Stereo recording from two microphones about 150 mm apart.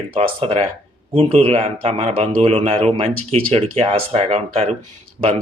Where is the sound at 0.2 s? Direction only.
40° right (ahead or behind).